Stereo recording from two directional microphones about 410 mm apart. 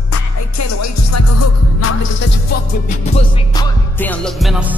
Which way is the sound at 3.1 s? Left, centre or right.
Centre.